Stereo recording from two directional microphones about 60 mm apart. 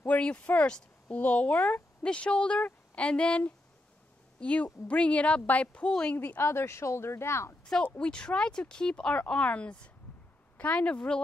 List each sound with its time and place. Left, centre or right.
0.0 s speech: left
2.6 s a sound: left
3.1 s a woman's voice: centre
6.1 s a woman's voice: left
8.0 s speech: centre